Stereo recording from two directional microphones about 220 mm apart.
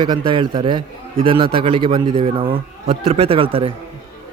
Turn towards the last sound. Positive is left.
turn(degrees=-25)  # may be behind; listen again after turning